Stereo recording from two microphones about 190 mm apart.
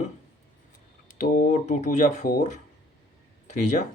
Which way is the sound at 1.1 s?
45° left (ahead or behind).